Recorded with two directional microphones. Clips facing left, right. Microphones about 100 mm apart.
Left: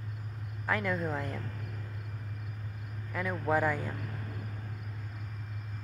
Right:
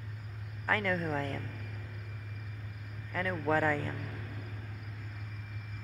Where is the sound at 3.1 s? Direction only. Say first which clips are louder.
Even; 15° left (ahead or behind).